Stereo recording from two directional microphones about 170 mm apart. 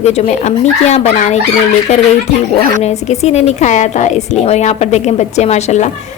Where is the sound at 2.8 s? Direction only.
40° left (ahead or behind).